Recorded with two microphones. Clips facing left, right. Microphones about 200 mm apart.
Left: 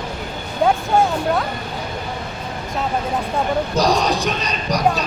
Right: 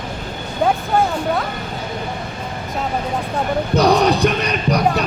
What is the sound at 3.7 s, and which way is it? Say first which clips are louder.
Speech: right 6 dB; 60° right (ahead or behind).